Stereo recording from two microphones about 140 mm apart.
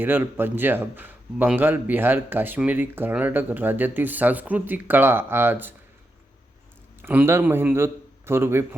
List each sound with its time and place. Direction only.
0.0 s speech: 15° right (ahead or behind)
7.0 s a man's voice: 15° right (ahead or behind)